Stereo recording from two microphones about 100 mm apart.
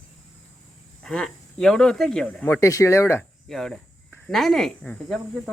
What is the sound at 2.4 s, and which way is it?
Speech, 30° left (ahead or behind).